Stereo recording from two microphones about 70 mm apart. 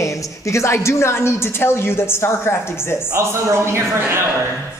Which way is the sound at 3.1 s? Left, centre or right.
Right.